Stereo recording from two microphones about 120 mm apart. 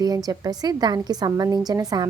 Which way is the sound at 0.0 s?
35° right (ahead or behind).